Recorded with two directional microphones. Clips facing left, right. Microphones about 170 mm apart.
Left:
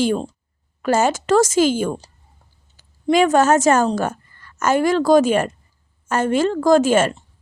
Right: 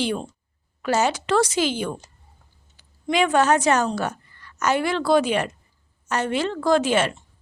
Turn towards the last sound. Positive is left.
turn(degrees=45)  # may be behind; listen again after turning